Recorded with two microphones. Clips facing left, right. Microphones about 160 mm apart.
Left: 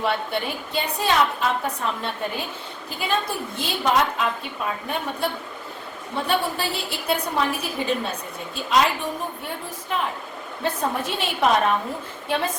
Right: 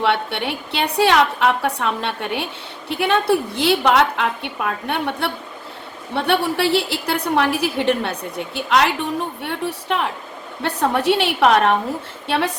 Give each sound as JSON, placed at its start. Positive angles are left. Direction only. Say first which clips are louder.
{"t": 0.0, "sound": "a woman's voice", "louder": "right 4 dB", "side_deg": -75}